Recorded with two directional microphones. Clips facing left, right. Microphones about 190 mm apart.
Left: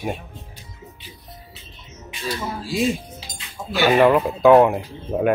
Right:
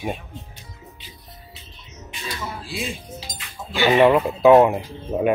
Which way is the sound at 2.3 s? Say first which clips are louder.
Left 6 dB; 40° left (ahead or behind).